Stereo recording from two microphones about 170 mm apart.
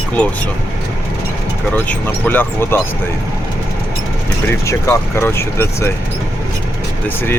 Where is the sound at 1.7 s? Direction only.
10° left (ahead or behind).